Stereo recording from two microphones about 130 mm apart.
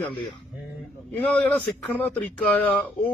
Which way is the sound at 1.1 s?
10° left (ahead or behind).